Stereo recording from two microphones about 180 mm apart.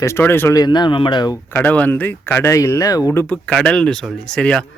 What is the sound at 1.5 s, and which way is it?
Speech, 10° left (ahead or behind).